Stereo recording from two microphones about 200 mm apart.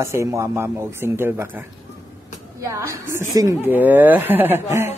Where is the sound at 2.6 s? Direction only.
15° right (ahead or behind).